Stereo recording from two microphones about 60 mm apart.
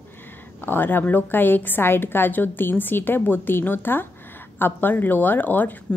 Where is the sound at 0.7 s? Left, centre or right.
Left.